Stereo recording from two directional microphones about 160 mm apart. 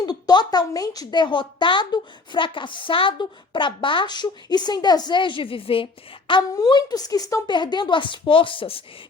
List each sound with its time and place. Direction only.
0.0 s speech: 25° left (ahead or behind)